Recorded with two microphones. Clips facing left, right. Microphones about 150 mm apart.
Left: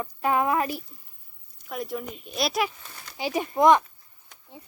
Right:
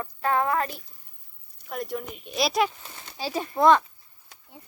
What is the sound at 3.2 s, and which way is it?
Speech, 15° left (ahead or behind).